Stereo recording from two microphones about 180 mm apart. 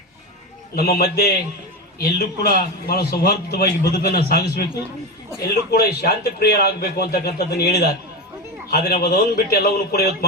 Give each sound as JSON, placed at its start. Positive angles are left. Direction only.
{"t": 0.8, "sound": "a man's voice", "side_deg": 60}
{"t": 5.7, "sound": "a man's voice", "side_deg": 60}